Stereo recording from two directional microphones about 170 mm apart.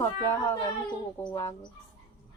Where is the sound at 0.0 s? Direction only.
15° left (ahead or behind).